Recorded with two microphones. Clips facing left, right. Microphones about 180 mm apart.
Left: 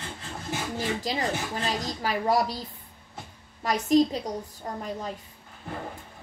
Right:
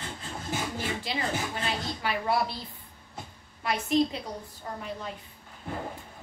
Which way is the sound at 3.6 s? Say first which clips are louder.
Left 4 dB; 40° left (ahead or behind).